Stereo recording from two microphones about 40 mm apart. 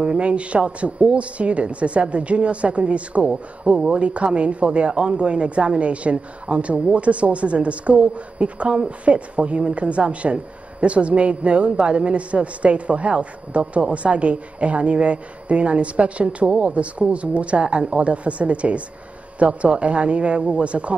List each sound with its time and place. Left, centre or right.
0.0 s speech: right